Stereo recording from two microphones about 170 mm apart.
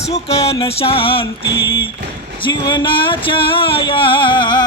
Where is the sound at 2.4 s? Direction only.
30° left (ahead or behind).